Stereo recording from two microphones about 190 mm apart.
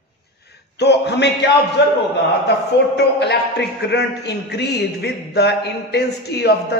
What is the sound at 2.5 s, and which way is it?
A man's voice, 65° left (ahead or behind).